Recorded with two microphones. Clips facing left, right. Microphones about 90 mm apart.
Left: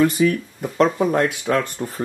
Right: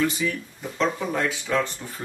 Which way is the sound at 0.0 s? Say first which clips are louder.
Left 8 dB; 55° left (ahead or behind).